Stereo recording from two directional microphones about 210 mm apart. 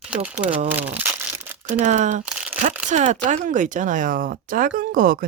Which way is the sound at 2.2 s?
5° right (ahead or behind).